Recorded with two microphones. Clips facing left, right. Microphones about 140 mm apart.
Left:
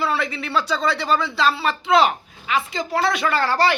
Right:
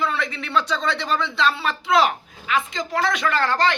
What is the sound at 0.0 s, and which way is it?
A woman's voice, 5° left (ahead or behind).